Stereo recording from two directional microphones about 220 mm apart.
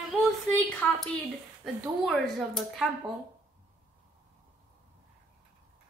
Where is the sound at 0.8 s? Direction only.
5° left (ahead or behind).